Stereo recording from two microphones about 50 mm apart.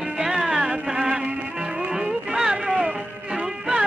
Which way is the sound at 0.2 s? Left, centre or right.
Centre.